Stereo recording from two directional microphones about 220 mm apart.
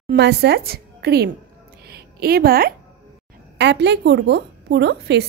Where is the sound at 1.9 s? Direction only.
45° right (ahead or behind).